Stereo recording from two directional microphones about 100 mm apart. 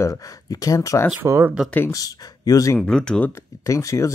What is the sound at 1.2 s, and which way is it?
Speech, 25° right (ahead or behind).